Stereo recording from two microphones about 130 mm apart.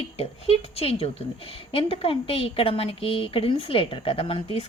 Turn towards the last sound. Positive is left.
turn(degrees=45)  # may be behind; listen again after turning